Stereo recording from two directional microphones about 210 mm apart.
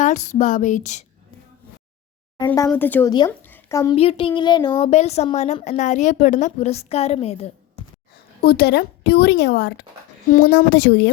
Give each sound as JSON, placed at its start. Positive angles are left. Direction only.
{"t": 0.0, "sound": "a woman's voice", "side_deg": 35}
{"t": 2.6, "sound": "speech", "side_deg": 10}
{"t": 3.9, "sound": "speech", "side_deg": 25}
{"t": 4.9, "sound": "a woman's voice", "side_deg": 30}
{"t": 8.4, "sound": "a woman's voice", "side_deg": 50}